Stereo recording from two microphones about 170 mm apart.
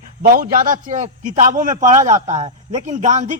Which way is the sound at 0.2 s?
60° right (ahead or behind).